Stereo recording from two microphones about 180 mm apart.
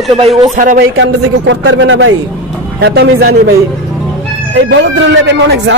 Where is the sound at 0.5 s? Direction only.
45° right (ahead or behind).